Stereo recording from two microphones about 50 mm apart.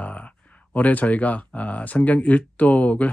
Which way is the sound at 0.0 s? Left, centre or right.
Left.